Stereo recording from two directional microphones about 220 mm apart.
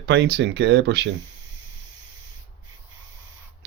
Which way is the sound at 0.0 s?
50° right (ahead or behind).